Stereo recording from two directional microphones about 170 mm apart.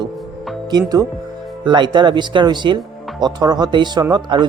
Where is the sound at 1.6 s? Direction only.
25° right (ahead or behind).